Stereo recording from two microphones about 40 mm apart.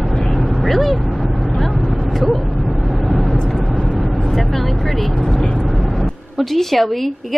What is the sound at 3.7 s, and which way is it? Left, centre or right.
Vehicle, right.